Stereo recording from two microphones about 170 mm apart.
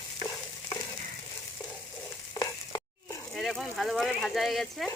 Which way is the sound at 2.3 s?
20° left (ahead or behind).